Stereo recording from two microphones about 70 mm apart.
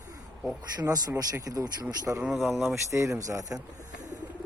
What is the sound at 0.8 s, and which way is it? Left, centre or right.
Speech, right.